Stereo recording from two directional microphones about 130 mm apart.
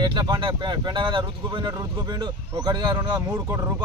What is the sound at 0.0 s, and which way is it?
Speech, 35° right (ahead or behind).